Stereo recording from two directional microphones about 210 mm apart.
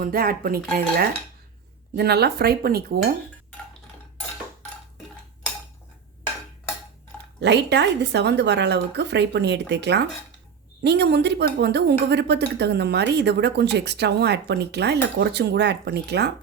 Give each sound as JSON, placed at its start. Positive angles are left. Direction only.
{"t": 0.0, "sound": "a woman's voice", "side_deg": -45}
{"t": 7.3, "sound": "a woman's voice", "side_deg": -55}